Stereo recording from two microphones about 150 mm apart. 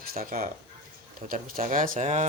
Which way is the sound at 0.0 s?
80° right.